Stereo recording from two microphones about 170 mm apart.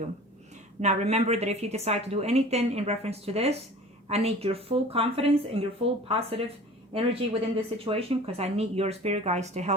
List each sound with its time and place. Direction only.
0.8 s a woman's voice: 40° right (ahead or behind)